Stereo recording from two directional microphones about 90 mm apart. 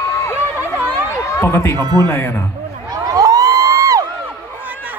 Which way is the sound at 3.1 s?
45° right (ahead or behind).